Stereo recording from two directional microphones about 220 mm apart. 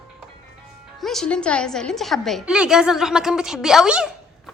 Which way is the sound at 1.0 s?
Centre (ahead or behind).